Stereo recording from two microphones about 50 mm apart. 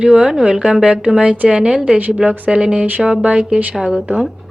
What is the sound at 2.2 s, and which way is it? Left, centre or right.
Speech, centre.